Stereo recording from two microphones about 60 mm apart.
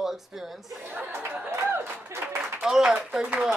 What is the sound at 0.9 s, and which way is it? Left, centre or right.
Chatter, right.